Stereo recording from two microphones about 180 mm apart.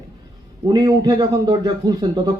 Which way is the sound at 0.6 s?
20° right (ahead or behind).